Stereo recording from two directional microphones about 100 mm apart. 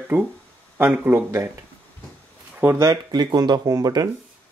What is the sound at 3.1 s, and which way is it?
Speech, 45° right (ahead or behind).